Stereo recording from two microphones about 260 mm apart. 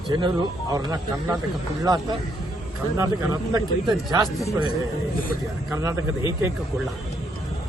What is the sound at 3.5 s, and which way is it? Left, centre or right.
Speech, centre.